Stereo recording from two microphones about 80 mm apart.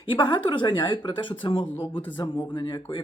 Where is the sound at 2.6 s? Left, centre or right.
Left.